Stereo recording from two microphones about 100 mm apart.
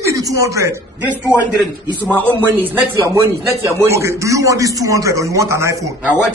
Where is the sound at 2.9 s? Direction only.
30° right (ahead or behind).